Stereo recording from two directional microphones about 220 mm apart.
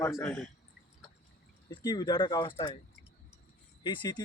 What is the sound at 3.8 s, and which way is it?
Speech, 20° left (ahead or behind).